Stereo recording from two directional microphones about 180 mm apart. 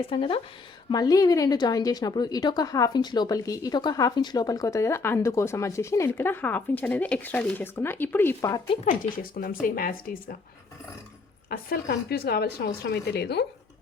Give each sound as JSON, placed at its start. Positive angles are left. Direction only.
{"t": 0.1, "sound": "speech", "side_deg": 30}
{"t": 8.8, "sound": "speech", "side_deg": 50}
{"t": 11.4, "sound": "speech", "side_deg": 55}